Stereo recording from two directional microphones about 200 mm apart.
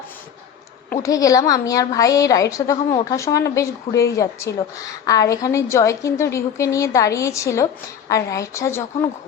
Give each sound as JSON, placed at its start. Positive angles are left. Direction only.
{"t": 1.0, "sound": "a woman's voice", "side_deg": 15}